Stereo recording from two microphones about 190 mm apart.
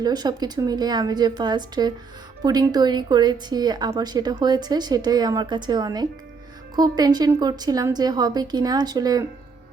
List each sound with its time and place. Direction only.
0.0 s speech: 20° right (ahead or behind)